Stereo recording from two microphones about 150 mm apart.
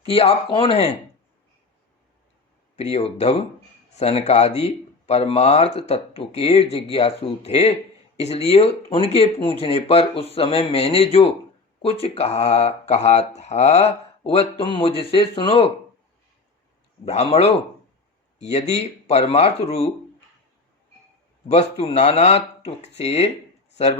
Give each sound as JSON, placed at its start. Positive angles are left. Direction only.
{"t": 0.0, "sound": "speech", "side_deg": 40}
{"t": 2.7, "sound": "speech", "side_deg": 45}
{"t": 17.1, "sound": "speech", "side_deg": 45}
{"t": 21.4, "sound": "speech", "side_deg": 45}